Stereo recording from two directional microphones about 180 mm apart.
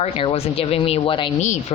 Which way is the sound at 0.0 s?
30° left (ahead or behind).